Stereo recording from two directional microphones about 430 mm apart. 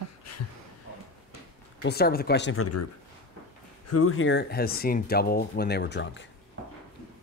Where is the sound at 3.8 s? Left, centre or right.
Left.